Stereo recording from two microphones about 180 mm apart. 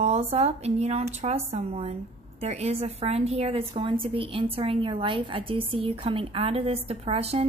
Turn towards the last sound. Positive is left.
turn(degrees=-35)  # may be behind; listen again after turning